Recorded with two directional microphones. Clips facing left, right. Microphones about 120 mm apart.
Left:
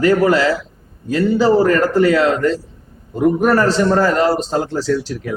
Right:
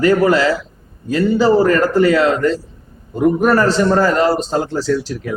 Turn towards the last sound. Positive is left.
turn(degrees=-15)  # may be behind; listen again after turning